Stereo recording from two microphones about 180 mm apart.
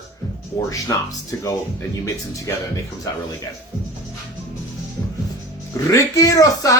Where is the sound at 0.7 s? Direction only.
20° left (ahead or behind).